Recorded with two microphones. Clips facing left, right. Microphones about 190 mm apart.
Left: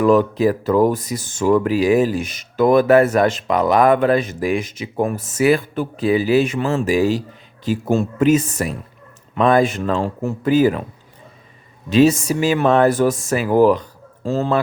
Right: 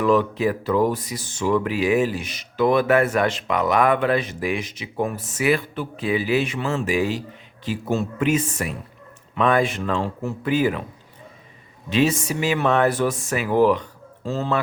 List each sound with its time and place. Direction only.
0.0 s speech: 45° left (ahead or behind)
11.9 s speech: 40° left (ahead or behind)